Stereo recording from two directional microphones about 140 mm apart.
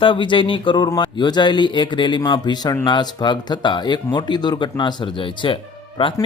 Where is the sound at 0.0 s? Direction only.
35° left (ahead or behind).